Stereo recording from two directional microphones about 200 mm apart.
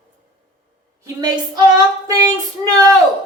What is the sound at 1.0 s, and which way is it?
A woman's voice, 20° right (ahead or behind).